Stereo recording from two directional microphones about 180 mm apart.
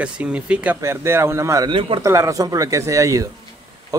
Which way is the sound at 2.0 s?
15° right (ahead or behind).